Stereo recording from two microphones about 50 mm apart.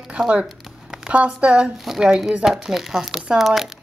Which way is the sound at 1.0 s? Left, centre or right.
Right.